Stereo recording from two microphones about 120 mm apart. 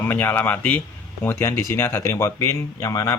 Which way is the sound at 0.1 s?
15° left (ahead or behind).